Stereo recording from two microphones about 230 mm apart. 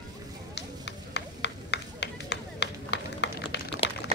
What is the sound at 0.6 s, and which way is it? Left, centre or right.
Run, left.